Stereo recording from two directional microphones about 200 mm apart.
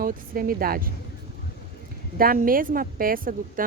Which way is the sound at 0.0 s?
45° right (ahead or behind).